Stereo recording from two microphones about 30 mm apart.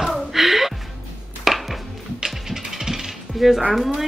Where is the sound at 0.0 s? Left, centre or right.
Centre.